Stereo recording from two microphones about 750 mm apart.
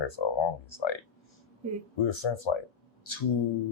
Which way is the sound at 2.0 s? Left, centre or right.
Left.